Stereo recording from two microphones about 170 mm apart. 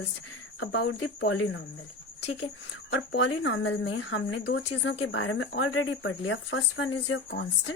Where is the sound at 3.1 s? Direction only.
90° left.